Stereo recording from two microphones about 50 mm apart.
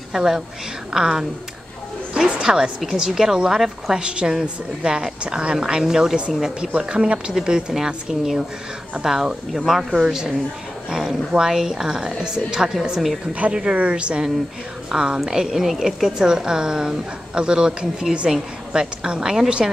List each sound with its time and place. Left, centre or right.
0.1 s a woman's voice: centre